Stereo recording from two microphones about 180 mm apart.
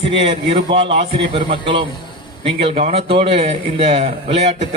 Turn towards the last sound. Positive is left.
turn(degrees=-35)  # may be behind; listen again after turning